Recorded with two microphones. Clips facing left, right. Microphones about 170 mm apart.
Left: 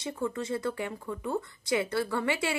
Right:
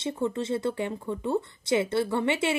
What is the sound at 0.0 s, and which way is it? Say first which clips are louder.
A woman's voice: right 4 dB; 25° right (ahead or behind).